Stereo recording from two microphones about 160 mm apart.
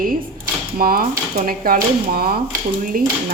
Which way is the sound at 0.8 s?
65° right (ahead or behind).